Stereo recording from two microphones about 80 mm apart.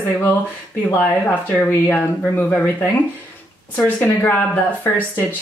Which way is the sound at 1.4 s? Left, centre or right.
Left.